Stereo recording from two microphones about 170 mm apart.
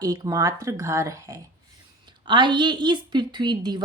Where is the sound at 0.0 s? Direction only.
20° right (ahead or behind).